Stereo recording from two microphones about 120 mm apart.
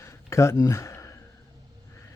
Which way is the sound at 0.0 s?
25° left (ahead or behind).